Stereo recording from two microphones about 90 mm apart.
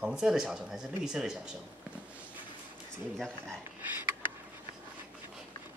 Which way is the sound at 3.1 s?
5° left (ahead or behind).